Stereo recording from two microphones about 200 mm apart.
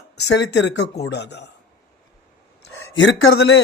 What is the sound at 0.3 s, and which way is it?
Speech, 60° left (ahead or behind).